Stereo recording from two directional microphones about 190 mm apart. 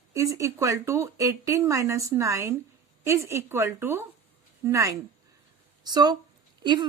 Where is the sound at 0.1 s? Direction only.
15° right (ahead or behind).